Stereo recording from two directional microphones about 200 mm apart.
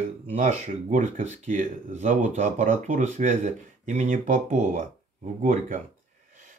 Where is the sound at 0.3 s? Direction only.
35° right (ahead or behind).